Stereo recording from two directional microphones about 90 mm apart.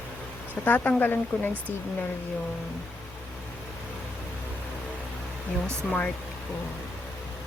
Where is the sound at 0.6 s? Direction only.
20° left (ahead or behind).